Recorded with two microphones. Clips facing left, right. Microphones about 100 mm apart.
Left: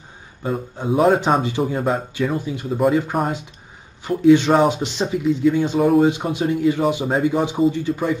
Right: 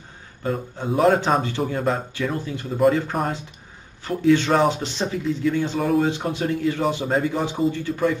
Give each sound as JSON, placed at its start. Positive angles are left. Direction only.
{"t": 0.4, "sound": "speech", "side_deg": 10}
{"t": 5.8, "sound": "speech", "side_deg": 5}
{"t": 6.0, "sound": "speech", "side_deg": 15}